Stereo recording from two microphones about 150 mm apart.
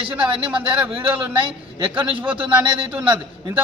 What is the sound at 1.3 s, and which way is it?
Speech, 35° right (ahead or behind).